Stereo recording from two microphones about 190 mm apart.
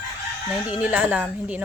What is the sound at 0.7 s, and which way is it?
Speech, 5° right (ahead or behind).